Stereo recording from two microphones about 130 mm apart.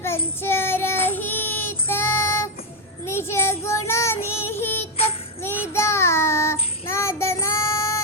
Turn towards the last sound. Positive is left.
turn(degrees=20)  # may be behind; listen again after turning